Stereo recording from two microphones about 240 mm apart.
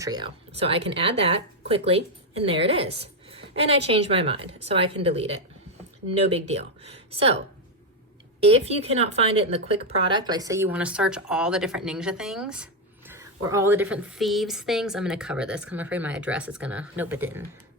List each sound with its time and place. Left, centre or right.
0.0 s a woman's voice: centre